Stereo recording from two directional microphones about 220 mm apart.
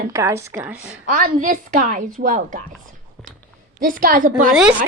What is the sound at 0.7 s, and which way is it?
A woman's voice, 40° right (ahead or behind).